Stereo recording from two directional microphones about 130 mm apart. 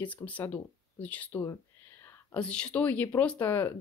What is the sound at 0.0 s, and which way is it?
Speech, 10° left (ahead or behind).